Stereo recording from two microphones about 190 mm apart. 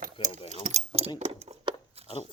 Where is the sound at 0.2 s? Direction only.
30° left (ahead or behind).